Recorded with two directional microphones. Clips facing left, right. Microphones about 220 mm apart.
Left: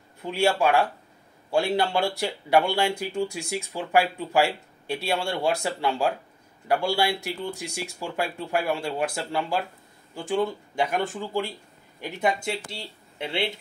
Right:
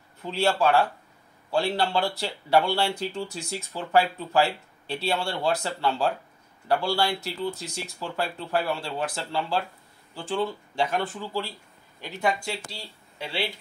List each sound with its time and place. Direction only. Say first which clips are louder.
0.2 s speech: left 1 dB; 10° left (ahead or behind)